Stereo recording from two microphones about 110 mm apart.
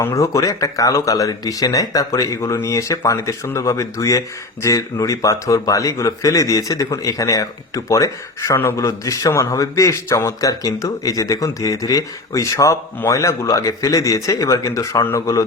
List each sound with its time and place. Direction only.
0.0 s speech: 30° left (ahead or behind)